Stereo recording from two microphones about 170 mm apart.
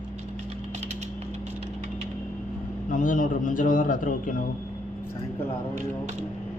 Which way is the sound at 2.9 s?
50° left (ahead or behind).